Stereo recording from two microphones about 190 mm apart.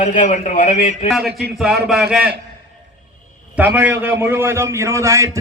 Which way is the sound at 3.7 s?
10° right (ahead or behind).